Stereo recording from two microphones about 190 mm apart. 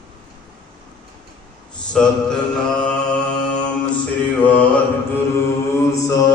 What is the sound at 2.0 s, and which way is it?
Mantra, centre (ahead or behind).